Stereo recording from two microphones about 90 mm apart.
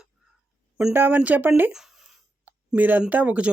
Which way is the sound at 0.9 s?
20° right (ahead or behind).